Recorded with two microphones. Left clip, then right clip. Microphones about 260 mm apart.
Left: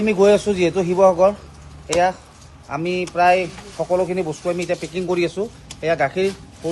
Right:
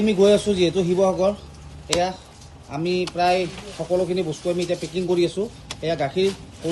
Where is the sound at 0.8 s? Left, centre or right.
Left.